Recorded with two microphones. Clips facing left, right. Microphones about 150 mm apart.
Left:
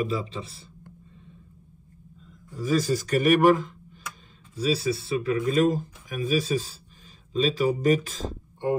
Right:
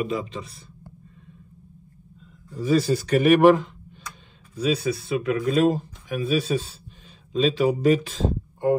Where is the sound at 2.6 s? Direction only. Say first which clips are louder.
Right 3 dB; 40° left (ahead or behind).